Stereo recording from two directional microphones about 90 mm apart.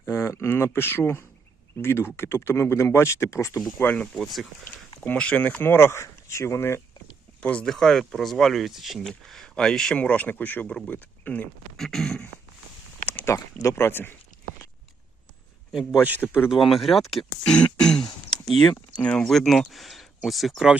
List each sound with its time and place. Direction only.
0.0 s speech: 30° left (ahead or behind)
3.8 s speech: 15° left (ahead or behind)
4.2 s speech: centre (ahead or behind)
4.9 s speech: 10° left (ahead or behind); by 6.8 s 30° left (ahead or behind)
7.4 s speech: 10° left (ahead or behind)
11.8 s speech: 5° left (ahead or behind)
13.2 s speech: 35° left (ahead or behind)
16.0 s a man's voice: 20° right (ahead or behind)
16.5 s speech: centre (ahead or behind)
18.3 s a sound: 5° left (ahead or behind)
18.9 s speech: 10° left (ahead or behind)